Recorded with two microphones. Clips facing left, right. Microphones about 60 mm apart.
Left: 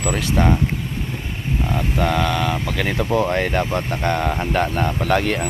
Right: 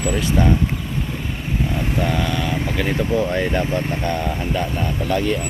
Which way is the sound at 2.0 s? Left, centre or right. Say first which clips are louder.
Left 4 dB; left.